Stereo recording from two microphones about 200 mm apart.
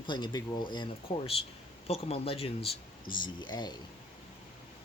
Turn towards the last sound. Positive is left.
turn(degrees=20)  # may be behind; listen again after turning